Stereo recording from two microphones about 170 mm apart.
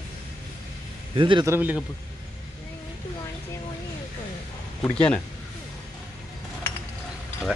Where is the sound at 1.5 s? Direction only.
10° right (ahead or behind).